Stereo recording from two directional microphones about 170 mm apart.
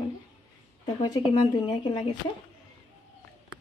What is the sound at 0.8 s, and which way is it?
Speech, 25° left (ahead or behind).